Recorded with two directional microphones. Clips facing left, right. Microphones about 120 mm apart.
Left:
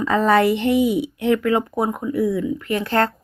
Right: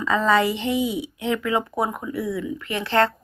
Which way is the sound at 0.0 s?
50° left (ahead or behind).